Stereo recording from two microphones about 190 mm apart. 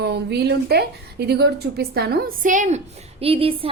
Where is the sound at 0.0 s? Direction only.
60° right (ahead or behind).